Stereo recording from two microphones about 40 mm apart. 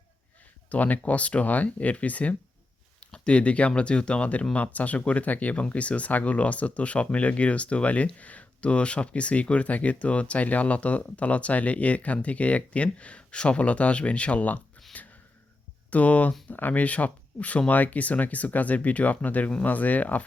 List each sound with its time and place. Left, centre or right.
0.7 s speech: left
3.0 s a sound: left
3.8 s speech: left
14.9 s gasp: left
15.9 s speech: left